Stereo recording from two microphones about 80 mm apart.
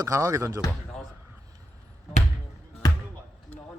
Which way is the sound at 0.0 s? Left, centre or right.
Right.